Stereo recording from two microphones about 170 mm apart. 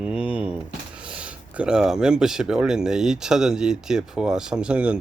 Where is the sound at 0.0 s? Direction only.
5° right (ahead or behind).